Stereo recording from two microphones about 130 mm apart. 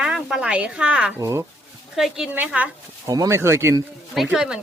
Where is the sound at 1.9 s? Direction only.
5° right (ahead or behind).